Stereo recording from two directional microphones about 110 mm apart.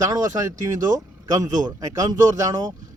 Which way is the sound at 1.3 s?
35° right (ahead or behind).